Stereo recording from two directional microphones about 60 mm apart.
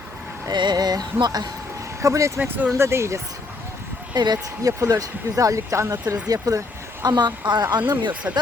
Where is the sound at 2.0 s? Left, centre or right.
Right.